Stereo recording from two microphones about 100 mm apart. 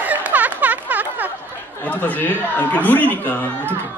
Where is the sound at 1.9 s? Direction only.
15° left (ahead or behind).